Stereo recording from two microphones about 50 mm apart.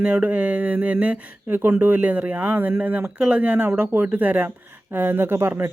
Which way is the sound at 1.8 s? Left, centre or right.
Right.